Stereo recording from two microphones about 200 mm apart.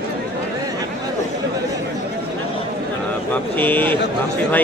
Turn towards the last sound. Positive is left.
turn(degrees=10)  # may be behind; listen again after turning